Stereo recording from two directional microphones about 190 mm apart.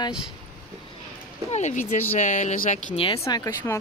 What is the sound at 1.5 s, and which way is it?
Speech, 35° left (ahead or behind).